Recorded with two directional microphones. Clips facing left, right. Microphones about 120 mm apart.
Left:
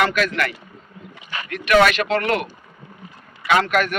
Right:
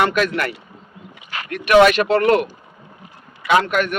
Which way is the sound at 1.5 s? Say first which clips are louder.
Right 4 dB; 40° right (ahead or behind).